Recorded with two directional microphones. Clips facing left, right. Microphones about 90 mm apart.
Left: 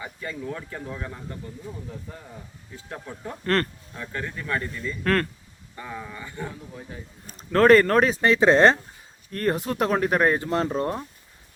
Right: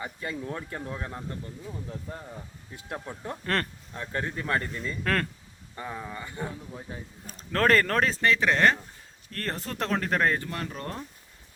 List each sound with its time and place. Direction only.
0.2 s speech: 25° right (ahead or behind)
3.4 s speech: centre (ahead or behind)
4.1 s speech: 35° right (ahead or behind)
5.0 s speech: centre (ahead or behind)
5.8 s speech: 20° right (ahead or behind)
7.3 s speech: 5° left (ahead or behind)
8.2 s speech: 20° left (ahead or behind)
9.3 s speech: 10° left (ahead or behind)